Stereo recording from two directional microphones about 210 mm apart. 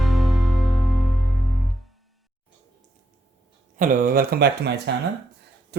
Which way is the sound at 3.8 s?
40° right (ahead or behind).